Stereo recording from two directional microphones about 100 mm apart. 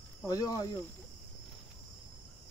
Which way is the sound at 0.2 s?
35° left (ahead or behind).